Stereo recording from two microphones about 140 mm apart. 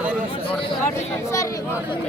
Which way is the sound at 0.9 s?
20° left (ahead or behind).